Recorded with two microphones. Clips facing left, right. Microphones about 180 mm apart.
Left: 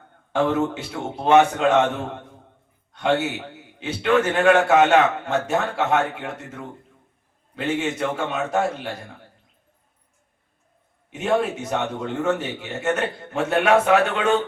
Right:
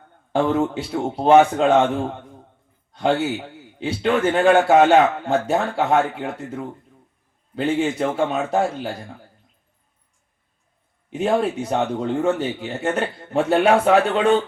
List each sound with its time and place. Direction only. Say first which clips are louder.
0.3 s a man's voice: right 2 dB; 35° right (ahead or behind)
2.9 s a man's voice: right 2 dB; 30° right (ahead or behind)
11.1 s a man's voice: right 2 dB; 30° right (ahead or behind)